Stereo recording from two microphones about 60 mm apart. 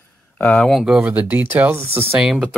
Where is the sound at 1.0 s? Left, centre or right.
Right.